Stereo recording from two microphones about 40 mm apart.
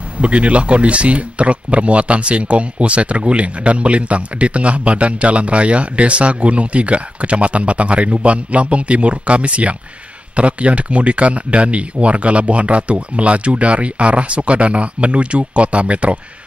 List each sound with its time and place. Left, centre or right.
0.2 s speech: right